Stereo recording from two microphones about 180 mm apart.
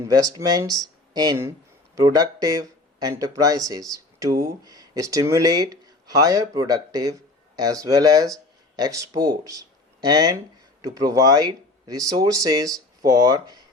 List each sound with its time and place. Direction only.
0.0 s speech: 20° right (ahead or behind)